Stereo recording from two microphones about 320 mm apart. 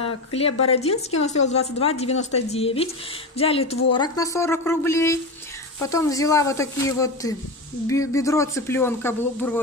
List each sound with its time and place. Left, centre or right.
0.3 s a woman's voice: centre